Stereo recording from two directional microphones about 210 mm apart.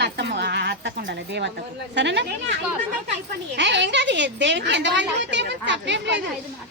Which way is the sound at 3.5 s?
55° right (ahead or behind).